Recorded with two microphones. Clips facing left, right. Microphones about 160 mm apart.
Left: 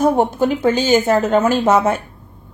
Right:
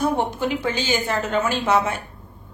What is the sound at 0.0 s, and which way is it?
Speech, 45° left (ahead or behind).